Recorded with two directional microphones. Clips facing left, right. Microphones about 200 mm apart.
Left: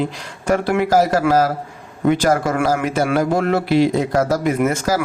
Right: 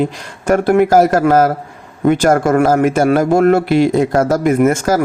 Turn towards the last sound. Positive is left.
turn(degrees=-50)  # may be behind; listen again after turning